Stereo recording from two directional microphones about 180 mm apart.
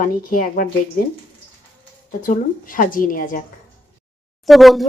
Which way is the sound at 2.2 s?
50° left (ahead or behind).